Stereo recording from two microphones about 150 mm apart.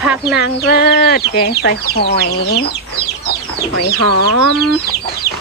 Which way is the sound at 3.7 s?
90° left.